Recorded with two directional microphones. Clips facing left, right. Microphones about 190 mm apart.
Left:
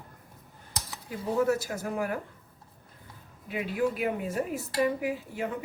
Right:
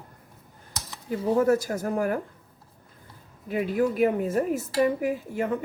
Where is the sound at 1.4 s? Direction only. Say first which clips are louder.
Right 5 dB; 45° right (ahead or behind).